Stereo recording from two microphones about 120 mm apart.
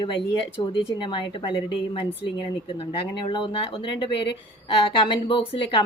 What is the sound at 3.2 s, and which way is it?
A woman's voice, 40° left (ahead or behind).